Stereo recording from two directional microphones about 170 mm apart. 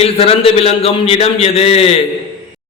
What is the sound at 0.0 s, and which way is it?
A man's voice, 35° left (ahead or behind).